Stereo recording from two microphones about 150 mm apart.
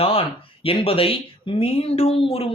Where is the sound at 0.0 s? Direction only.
40° left (ahead or behind).